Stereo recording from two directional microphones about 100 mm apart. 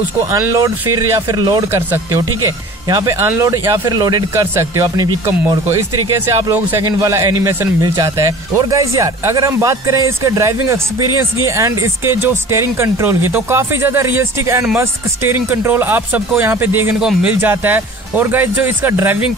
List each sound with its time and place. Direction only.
0.3 s speech: 30° right (ahead or behind)
1.6 s speech: 30° right (ahead or behind)
3.8 s speech: 40° right (ahead or behind); by 6.8 s 25° right (ahead or behind)
6.8 s speech: 35° right (ahead or behind)